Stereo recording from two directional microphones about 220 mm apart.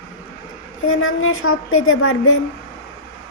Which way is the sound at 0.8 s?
70° left (ahead or behind).